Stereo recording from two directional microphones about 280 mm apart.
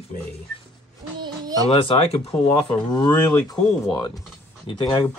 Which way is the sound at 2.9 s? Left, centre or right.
Centre.